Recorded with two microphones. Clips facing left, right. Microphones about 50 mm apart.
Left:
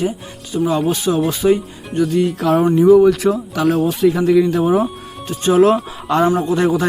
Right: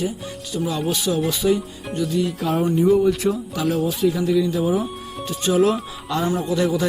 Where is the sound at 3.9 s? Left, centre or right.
Left.